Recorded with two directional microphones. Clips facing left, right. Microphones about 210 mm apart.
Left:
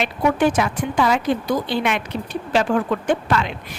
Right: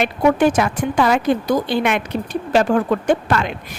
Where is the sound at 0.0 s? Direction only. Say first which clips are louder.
Right 3 dB; 45° right (ahead or behind).